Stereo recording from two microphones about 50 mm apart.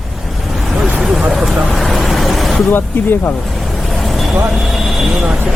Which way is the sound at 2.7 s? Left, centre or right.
Left.